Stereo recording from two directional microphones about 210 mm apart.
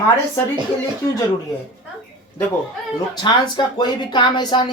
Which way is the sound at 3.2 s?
20° left (ahead or behind).